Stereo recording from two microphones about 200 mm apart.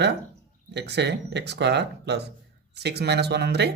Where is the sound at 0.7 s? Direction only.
55° right (ahead or behind).